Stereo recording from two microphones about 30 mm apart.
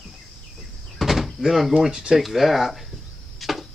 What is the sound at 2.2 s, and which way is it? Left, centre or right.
Speech, centre.